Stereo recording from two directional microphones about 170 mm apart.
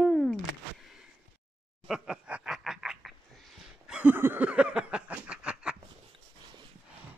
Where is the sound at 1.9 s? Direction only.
5° right (ahead or behind).